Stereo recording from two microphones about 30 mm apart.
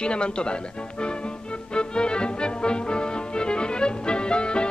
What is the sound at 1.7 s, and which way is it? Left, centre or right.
Music, left.